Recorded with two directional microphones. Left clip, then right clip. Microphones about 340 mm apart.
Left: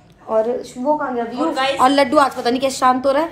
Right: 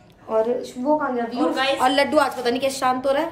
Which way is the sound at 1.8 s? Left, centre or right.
Centre.